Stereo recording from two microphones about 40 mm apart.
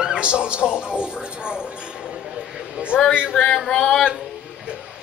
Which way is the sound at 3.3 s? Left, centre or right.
Left.